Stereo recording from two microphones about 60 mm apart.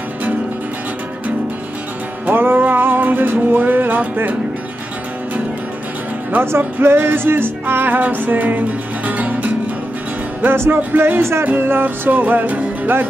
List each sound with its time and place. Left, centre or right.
2.2 s music: right
6.6 s music: right
10.4 s music: right
10.8 s music: right